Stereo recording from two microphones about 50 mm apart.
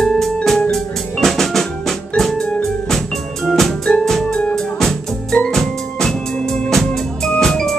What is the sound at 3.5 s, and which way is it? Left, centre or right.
Music, centre.